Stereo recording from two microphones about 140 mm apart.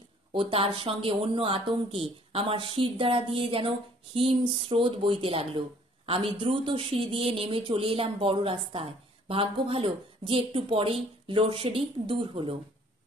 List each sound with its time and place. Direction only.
0.3 s speech: 40° right (ahead or behind)